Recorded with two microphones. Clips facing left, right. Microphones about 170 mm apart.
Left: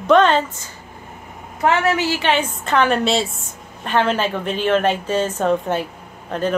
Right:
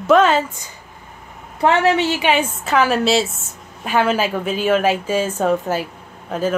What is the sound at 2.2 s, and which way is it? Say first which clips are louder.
A woman's voice: right 1 dB; 10° right (ahead or behind).